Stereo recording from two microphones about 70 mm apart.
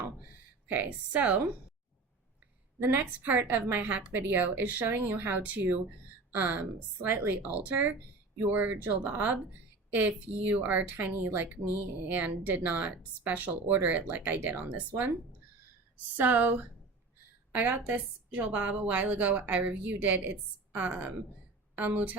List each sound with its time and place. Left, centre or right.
0.7 s speech: right
2.8 s speech: right
16.1 s speech: right